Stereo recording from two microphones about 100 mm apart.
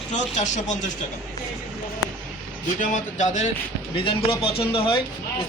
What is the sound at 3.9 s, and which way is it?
A man's voice, 65° left (ahead or behind).